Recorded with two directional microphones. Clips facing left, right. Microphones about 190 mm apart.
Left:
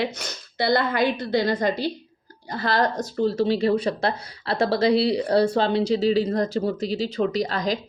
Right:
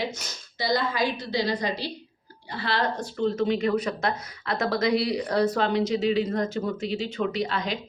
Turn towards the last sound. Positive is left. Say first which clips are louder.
# left 4 dB
turn(degrees=40)  # may be behind; listen again after turning